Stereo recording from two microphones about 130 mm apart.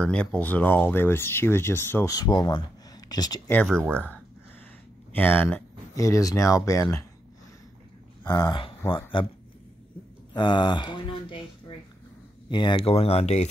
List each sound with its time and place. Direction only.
0.0 s speech: 5° left (ahead or behind); by 3.3 s 30° left (ahead or behind)
3.9 s speech: 10° left (ahead or behind)
5.9 s speech: 25° left (ahead or behind)
8.2 s speech: 30° left (ahead or behind)
10.3 s speech: 35° left (ahead or behind)
12.4 s speech: 35° left (ahead or behind); by 13.5 s 55° left (ahead or behind)